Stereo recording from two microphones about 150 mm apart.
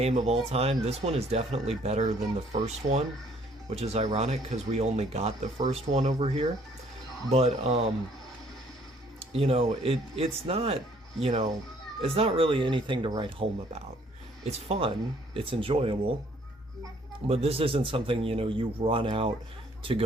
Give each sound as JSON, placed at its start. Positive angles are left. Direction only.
{"t": 0.0, "sound": "speech", "side_deg": -45}
{"t": 3.7, "sound": "speech", "side_deg": -45}
{"t": 9.3, "sound": "speech", "side_deg": -40}
{"t": 17.2, "sound": "a man's voice", "side_deg": -40}